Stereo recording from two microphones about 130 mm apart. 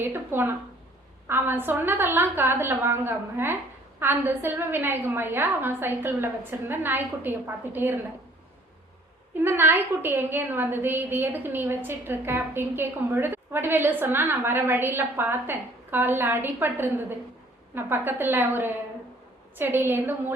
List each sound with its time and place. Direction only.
0.0 s a woman's voice: 15° right (ahead or behind)
9.4 s a woman's voice: 15° right (ahead or behind)